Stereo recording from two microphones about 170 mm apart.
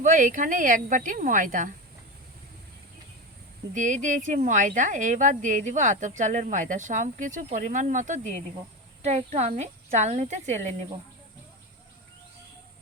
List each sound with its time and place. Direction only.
0.0 s speech: 45° right (ahead or behind)
3.8 s speech: 50° right (ahead or behind)